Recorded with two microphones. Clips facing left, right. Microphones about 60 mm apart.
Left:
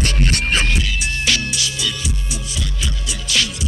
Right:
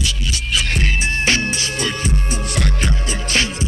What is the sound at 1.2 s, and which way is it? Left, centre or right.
Music, right.